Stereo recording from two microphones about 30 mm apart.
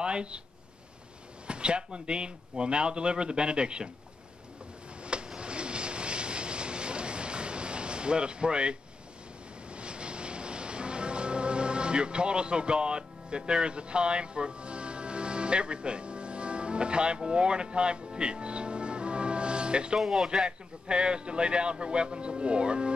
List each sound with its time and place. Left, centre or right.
0.0 s speech: right
1.5 s speech: right
5.0 s vehicle: right
17.2 s music: right
20.4 s speech: right